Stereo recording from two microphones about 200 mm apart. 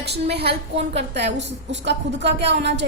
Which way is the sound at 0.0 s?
55° right (ahead or behind).